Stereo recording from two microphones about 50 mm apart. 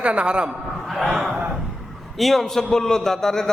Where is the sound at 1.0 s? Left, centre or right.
Centre.